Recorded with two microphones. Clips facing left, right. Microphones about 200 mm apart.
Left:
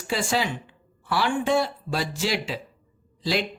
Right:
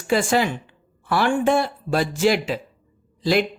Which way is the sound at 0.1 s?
55° right (ahead or behind).